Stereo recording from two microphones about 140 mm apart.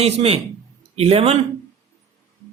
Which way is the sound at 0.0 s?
50° right (ahead or behind).